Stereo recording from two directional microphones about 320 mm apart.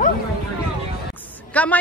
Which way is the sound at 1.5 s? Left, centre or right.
Centre.